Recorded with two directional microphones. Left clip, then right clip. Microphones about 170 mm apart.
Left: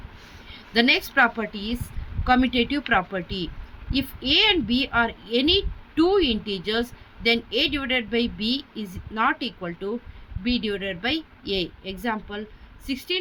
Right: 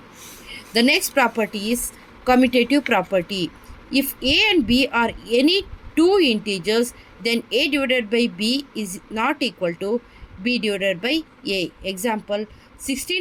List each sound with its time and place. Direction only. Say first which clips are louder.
0.7 s a woman's voice: right 2 dB; 20° right (ahead or behind)